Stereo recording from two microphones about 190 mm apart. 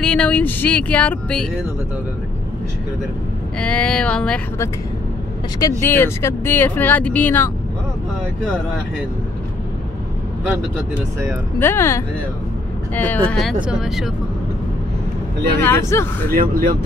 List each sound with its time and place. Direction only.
0.0 s speech: 5° left (ahead or behind)
3.5 s speech: 5° left (ahead or behind)
11.6 s speech: 10° left (ahead or behind)
15.6 s speech: 15° left (ahead or behind)
16.3 s speech: 50° right (ahead or behind)